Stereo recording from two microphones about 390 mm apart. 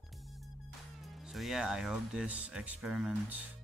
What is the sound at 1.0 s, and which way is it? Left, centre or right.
Speech, centre.